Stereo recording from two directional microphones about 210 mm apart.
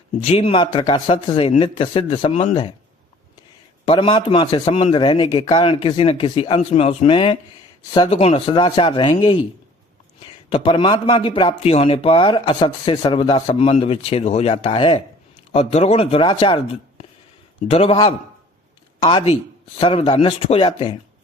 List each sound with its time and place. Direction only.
0.2 s a man's voice: 25° left (ahead or behind)
3.8 s a man's voice: 25° left (ahead or behind)
10.5 s a man's voice: 25° left (ahead or behind)
17.7 s a man's voice: 25° left (ahead or behind)